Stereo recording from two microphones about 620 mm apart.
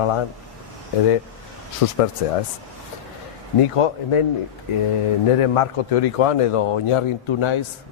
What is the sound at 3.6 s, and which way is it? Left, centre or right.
Speech, left.